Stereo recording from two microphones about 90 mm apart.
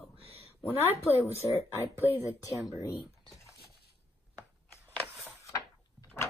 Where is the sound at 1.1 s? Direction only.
30° left (ahead or behind).